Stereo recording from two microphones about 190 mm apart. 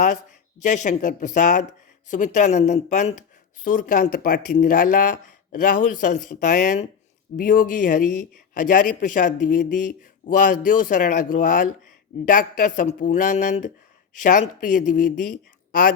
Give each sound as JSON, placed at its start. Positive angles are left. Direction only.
{"t": 0.6, "sound": "a woman's voice", "side_deg": 40}